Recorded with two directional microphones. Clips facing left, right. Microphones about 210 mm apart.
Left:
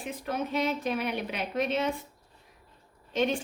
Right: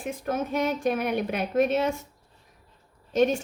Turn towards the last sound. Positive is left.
turn(degrees=-45)  # may be behind; listen again after turning